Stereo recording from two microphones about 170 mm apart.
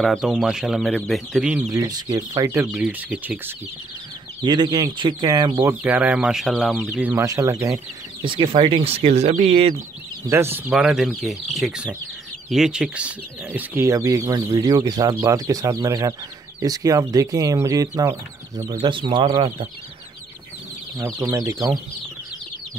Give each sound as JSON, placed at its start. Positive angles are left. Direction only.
{"t": 0.0, "sound": "speech", "side_deg": 0}
{"t": 1.7, "sound": "speech", "side_deg": -20}
{"t": 4.4, "sound": "speech", "side_deg": -25}
{"t": 7.0, "sound": "speech", "side_deg": -15}
{"t": 8.2, "sound": "speech", "side_deg": -30}
{"t": 10.2, "sound": "speech", "side_deg": -15}
{"t": 18.8, "sound": "speech", "side_deg": -30}
{"t": 21.0, "sound": "speech", "side_deg": -15}